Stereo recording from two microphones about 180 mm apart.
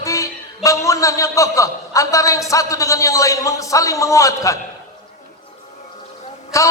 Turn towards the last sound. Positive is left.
turn(degrees=15)  # may be behind; listen again after turning